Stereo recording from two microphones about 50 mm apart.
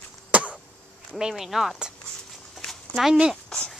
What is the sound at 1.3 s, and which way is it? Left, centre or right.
Speech, centre.